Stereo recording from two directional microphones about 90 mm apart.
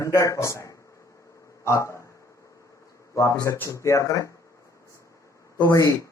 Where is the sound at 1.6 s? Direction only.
35° left (ahead or behind).